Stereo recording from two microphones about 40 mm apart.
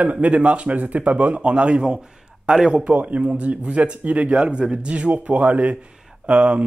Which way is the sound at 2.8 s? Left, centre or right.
Right.